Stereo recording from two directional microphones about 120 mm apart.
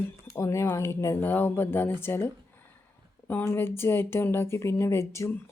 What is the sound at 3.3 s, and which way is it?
Speech, 15° left (ahead or behind).